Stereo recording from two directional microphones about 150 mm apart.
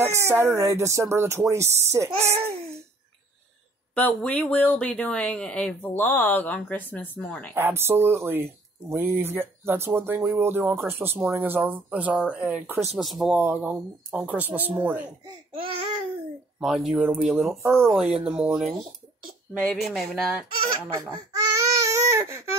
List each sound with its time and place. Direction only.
0.0 s speech: 15° right (ahead or behind)
3.9 s speech: 10° left (ahead or behind)
7.5 s speech: 15° right (ahead or behind)
13.4 s speech: 10° right (ahead or behind)
16.5 s speech: centre (ahead or behind)
20.9 s baby cry: 25° right (ahead or behind)